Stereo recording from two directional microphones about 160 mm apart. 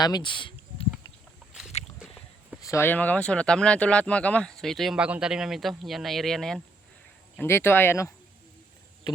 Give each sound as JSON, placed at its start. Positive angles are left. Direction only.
{"t": 0.0, "sound": "speech", "side_deg": 30}
{"t": 2.6, "sound": "speech", "side_deg": 15}
{"t": 7.3, "sound": "speech", "side_deg": 15}